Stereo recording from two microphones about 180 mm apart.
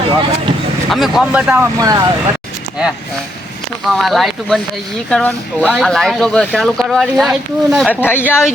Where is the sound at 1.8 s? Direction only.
20° right (ahead or behind).